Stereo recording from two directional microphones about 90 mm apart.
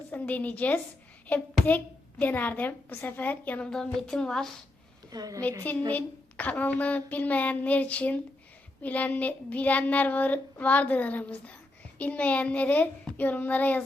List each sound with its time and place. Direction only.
0.1 s child singing: 15° left (ahead or behind)
1.6 s a child's voice: 20° left (ahead or behind)
4.0 s child singing: 5° left (ahead or behind)
5.1 s a woman's voice: 45° right (ahead or behind)
5.9 s child singing: 15° left (ahead or behind)